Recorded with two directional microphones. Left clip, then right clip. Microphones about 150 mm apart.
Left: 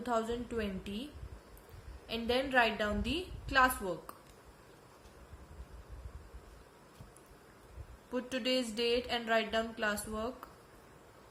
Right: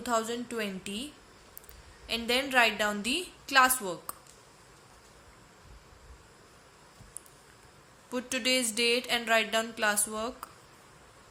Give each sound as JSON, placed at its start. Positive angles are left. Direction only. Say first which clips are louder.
{"t": 0.0, "sound": "speech", "louder": "right 4 dB", "side_deg": -15}
{"t": 2.0, "sound": "speech", "louder": "right 4 dB", "side_deg": -15}
{"t": 8.1, "sound": "speech", "louder": "right 5 dB", "side_deg": -15}